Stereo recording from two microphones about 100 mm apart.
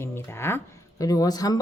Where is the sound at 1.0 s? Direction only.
35° left (ahead or behind).